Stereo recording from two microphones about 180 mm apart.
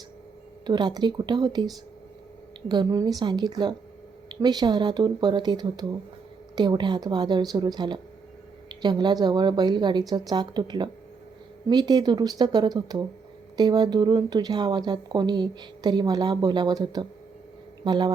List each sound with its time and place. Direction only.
0.6 s speech: 25° right (ahead or behind)
2.6 s speech: 20° right (ahead or behind)